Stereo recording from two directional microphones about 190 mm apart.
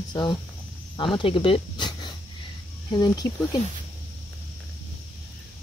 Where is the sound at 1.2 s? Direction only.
30° left (ahead or behind).